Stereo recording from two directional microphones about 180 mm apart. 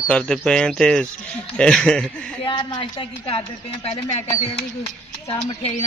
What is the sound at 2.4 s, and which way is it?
Speech, 25° left (ahead or behind).